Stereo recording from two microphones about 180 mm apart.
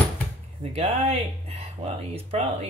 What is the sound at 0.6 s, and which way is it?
Speech, 35° right (ahead or behind).